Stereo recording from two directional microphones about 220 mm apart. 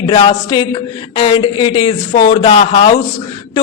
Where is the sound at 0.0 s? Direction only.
20° left (ahead or behind).